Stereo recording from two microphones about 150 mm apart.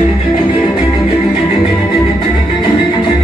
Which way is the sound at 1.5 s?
Centre (ahead or behind).